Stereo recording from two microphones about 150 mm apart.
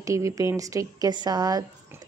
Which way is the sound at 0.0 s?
20° right (ahead or behind).